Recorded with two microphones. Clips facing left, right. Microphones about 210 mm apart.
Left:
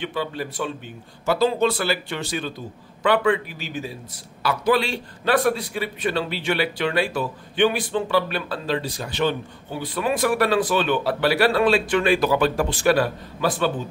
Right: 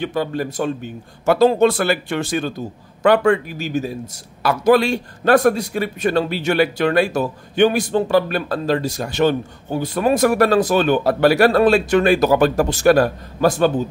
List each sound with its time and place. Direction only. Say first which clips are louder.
0.0 s a man's voice: right 6 dB; 45° right (ahead or behind)